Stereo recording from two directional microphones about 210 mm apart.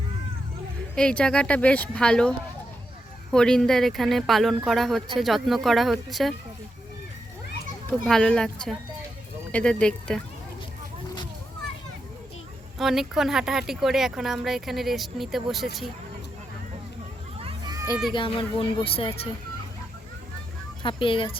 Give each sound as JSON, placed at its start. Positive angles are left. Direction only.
{"t": 0.9, "sound": "speech", "side_deg": 5}
{"t": 3.3, "sound": "speech", "side_deg": 5}
{"t": 8.0, "sound": "speech", "side_deg": 5}
{"t": 12.8, "sound": "speech", "side_deg": 0}
{"t": 17.4, "sound": "children playing", "side_deg": -20}
{"t": 18.1, "sound": "speech", "side_deg": 25}
{"t": 20.8, "sound": "speech", "side_deg": 25}